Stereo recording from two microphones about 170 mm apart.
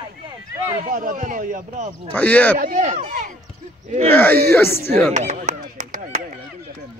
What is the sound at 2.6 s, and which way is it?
Speech, 50° right (ahead or behind).